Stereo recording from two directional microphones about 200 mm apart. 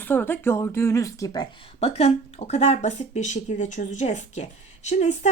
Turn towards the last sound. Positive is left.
turn(degrees=35)  # may be behind; listen again after turning